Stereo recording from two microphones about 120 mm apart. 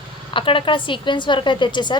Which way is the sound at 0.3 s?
45° left (ahead or behind).